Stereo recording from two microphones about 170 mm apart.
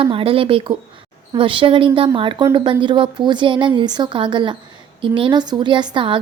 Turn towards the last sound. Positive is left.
turn(degrees=-30)  # may be behind; listen again after turning